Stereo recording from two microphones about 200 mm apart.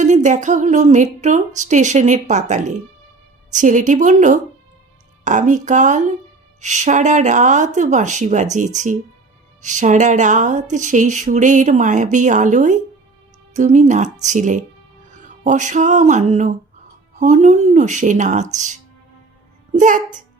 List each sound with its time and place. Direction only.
0.0 s speech: 35° right (ahead or behind)
15.2 s music: 40° right (ahead or behind)
17.2 s speech: 35° right (ahead or behind)